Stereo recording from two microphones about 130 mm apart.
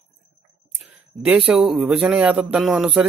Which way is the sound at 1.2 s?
10° right (ahead or behind).